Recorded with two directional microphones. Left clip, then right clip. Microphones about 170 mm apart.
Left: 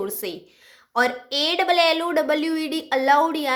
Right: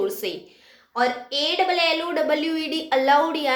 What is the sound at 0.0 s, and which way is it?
A woman's voice, 40° left (ahead or behind).